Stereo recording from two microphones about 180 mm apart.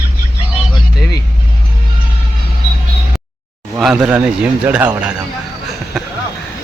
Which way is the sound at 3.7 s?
5° right (ahead or behind).